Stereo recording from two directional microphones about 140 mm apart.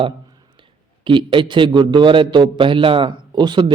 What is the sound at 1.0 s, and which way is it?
A man's voice, 35° right (ahead or behind).